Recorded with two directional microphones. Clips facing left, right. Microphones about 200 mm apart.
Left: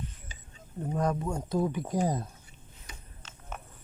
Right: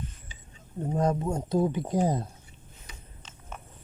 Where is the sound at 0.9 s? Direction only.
25° right (ahead or behind).